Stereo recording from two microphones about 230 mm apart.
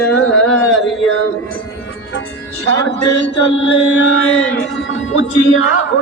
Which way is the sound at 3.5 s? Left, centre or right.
Left.